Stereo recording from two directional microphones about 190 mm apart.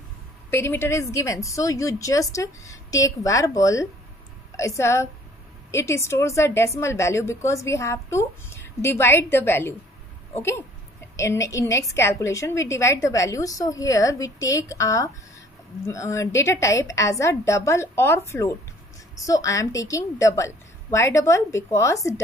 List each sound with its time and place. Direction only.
0.5 s a woman's voice: 10° left (ahead or behind)
11.1 s a woman's voice: 15° left (ahead or behind)